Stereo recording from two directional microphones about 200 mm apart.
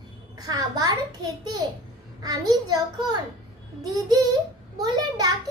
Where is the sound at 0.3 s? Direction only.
20° right (ahead or behind).